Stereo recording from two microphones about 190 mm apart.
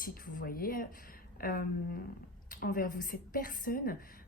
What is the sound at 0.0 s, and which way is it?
Speech, 45° left (ahead or behind).